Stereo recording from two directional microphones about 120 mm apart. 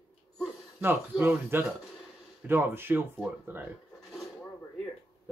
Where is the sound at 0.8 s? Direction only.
15° right (ahead or behind).